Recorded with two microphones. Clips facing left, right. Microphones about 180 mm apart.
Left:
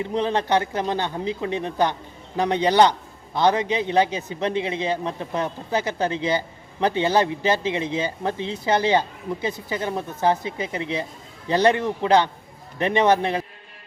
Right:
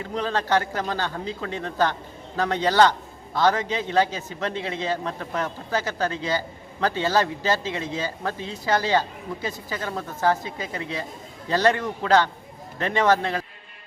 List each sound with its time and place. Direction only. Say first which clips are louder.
0.0 s a man's voice: left 4 dB; 20° left (ahead or behind)